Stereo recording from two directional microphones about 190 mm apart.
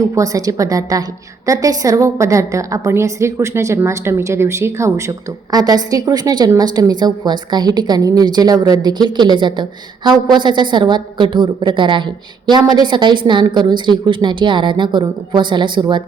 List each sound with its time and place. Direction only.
0.1 s a woman's voice: 20° right (ahead or behind)